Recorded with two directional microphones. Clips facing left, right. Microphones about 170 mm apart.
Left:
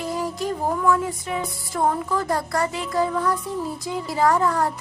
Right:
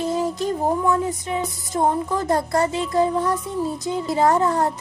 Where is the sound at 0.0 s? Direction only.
25° right (ahead or behind).